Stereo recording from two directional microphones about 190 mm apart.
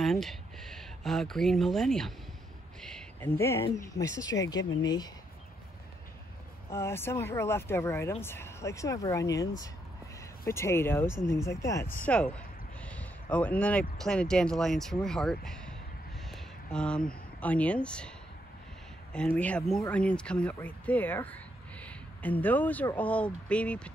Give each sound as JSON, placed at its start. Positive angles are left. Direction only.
{"t": 0.0, "sound": "speech", "side_deg": 0}
{"t": 2.8, "sound": "a sound", "side_deg": 5}
{"t": 3.3, "sound": "speech", "side_deg": 15}
{"t": 6.7, "sound": "speech", "side_deg": 15}
{"t": 19.1, "sound": "speech", "side_deg": 10}